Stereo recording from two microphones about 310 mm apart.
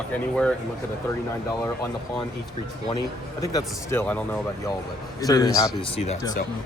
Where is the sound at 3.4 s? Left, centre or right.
Centre.